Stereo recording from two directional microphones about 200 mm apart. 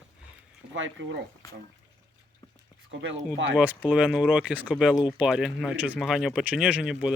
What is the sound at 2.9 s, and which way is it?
Speech, 65° right (ahead or behind).